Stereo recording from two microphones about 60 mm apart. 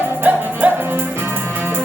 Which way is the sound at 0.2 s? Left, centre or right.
Right.